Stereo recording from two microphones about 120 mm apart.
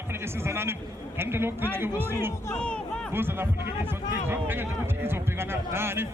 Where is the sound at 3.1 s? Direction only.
20° right (ahead or behind).